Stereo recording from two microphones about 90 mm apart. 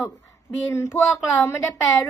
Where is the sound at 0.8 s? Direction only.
5° right (ahead or behind).